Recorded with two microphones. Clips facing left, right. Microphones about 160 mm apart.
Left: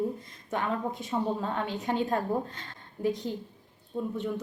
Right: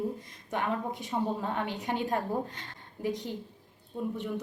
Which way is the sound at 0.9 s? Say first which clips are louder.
Left 2 dB; 15° right (ahead or behind).